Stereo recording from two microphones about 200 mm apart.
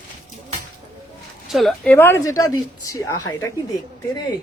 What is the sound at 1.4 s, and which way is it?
Speech, centre (ahead or behind).